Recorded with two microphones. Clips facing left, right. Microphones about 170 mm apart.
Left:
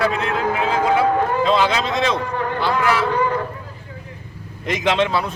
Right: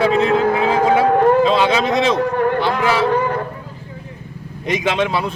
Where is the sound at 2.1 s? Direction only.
55° right (ahead or behind).